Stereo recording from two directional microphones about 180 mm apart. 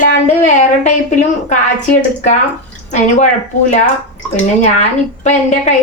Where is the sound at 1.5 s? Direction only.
40° left (ahead or behind).